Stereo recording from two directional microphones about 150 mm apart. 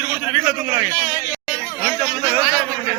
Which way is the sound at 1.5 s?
25° left (ahead or behind).